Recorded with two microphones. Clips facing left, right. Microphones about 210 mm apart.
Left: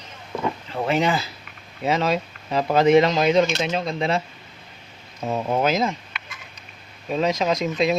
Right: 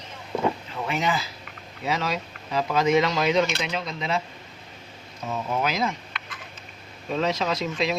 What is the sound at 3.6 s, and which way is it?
Speech, 40° left (ahead or behind).